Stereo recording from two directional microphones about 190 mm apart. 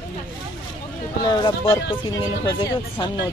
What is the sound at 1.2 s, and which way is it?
Speech, 25° left (ahead or behind).